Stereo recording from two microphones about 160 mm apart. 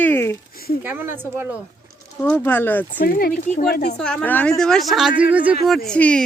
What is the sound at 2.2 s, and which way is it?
Speech, 10° left (ahead or behind).